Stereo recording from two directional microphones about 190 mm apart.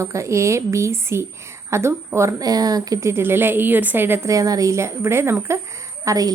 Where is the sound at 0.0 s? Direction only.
15° right (ahead or behind).